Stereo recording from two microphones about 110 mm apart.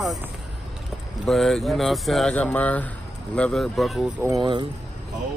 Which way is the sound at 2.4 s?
15° left (ahead or behind).